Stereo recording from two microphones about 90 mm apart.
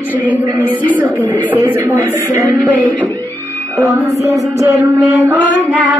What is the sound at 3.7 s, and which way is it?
Mantra, 40° right (ahead or behind).